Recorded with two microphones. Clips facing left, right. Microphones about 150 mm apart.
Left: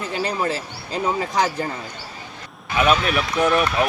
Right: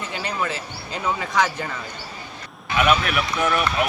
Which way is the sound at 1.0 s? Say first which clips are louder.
Left 1 dB; 35° left (ahead or behind).